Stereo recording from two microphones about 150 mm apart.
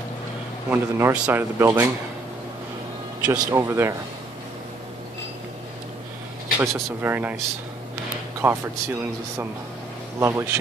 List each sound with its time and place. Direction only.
0.7 s speech: 15° right (ahead or behind)
3.3 s speech: 15° right (ahead or behind)
6.6 s speech: 15° right (ahead or behind)
8.4 s speech: 15° right (ahead or behind)
10.2 s speech: 20° right (ahead or behind)